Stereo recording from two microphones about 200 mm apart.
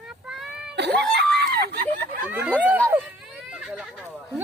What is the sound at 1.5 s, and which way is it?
Speech, 50° right (ahead or behind).